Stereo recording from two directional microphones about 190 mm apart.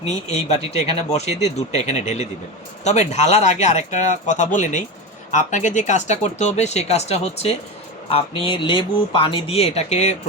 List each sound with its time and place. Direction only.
0.0 s speech: 35° left (ahead or behind)